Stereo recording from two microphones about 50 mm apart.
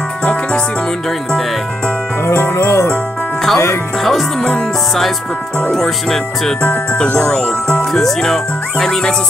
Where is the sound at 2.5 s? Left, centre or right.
Left.